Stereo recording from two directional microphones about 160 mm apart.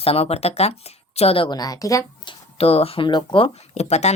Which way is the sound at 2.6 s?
40° left (ahead or behind).